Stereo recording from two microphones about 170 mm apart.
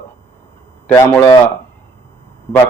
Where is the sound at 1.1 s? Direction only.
20° left (ahead or behind).